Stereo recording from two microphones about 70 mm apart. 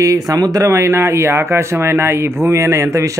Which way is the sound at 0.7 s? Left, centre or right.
Right.